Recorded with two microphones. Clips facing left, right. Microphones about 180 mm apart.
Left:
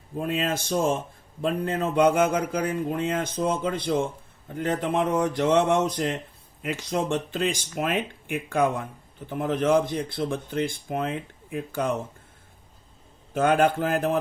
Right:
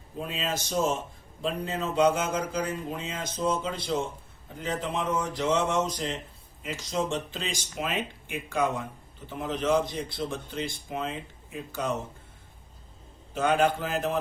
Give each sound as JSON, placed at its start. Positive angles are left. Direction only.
{"t": 0.2, "sound": "a man's voice", "side_deg": 55}
{"t": 13.3, "sound": "speech", "side_deg": 50}